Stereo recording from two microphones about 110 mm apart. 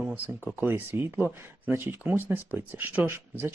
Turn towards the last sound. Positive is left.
turn(degrees=-20)  # may be behind; listen again after turning